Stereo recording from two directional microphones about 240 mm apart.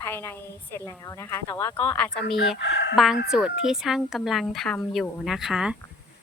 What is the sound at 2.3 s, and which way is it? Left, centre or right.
Chicken, left.